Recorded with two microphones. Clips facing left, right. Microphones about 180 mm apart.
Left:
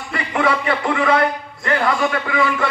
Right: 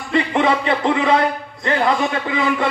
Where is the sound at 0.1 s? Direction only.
25° right (ahead or behind).